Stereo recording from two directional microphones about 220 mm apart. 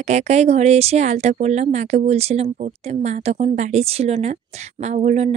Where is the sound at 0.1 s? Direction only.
30° right (ahead or behind).